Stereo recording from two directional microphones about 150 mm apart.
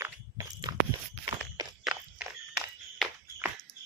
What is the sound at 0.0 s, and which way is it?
Walk, 25° right (ahead or behind).